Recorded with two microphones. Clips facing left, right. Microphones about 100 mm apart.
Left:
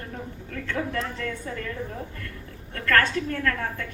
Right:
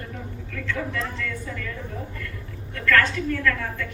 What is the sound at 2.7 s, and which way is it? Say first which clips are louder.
Speech: right 1 dB; 40° left (ahead or behind).